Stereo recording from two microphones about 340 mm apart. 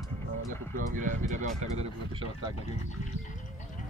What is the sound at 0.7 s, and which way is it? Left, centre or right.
Speech, right.